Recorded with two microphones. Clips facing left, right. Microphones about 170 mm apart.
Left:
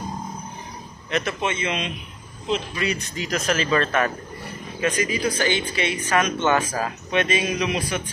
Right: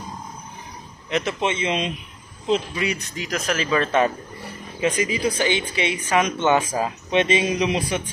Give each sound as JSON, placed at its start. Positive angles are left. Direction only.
{"t": 1.1, "sound": "speech", "side_deg": -20}
{"t": 2.7, "sound": "speech", "side_deg": -10}
{"t": 4.7, "sound": "speech", "side_deg": -20}